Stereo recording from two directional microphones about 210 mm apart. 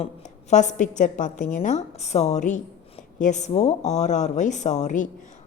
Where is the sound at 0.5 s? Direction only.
35° left (ahead or behind).